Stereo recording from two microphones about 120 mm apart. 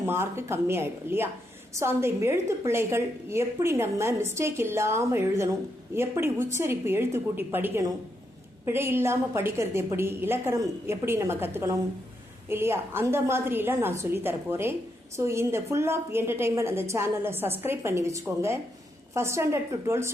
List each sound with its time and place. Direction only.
0.0 s a woman's voice: 20° right (ahead or behind)